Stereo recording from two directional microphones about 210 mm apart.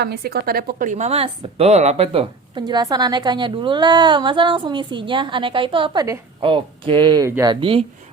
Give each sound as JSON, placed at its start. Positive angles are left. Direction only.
{"t": 0.0, "sound": "a woman's voice", "side_deg": -50}